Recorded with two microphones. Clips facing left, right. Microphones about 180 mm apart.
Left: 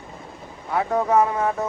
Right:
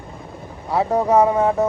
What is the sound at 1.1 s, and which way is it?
Speech, 20° right (ahead or behind).